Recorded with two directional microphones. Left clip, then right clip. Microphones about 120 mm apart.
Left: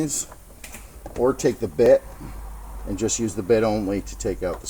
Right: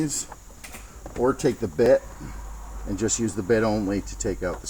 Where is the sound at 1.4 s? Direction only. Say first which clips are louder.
Left 3 dB; 10° right (ahead or behind).